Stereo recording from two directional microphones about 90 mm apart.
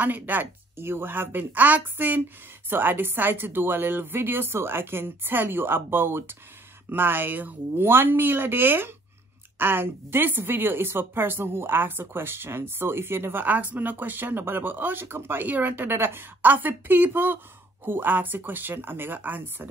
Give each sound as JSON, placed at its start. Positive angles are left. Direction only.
{"t": 0.0, "sound": "a woman's voice", "side_deg": -20}